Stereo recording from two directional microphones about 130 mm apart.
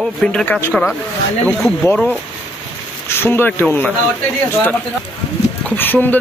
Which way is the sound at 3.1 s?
15° left (ahead or behind).